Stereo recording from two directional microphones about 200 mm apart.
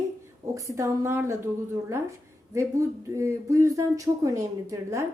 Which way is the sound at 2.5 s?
15° right (ahead or behind).